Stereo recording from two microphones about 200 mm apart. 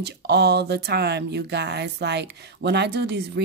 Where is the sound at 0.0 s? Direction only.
55° right (ahead or behind).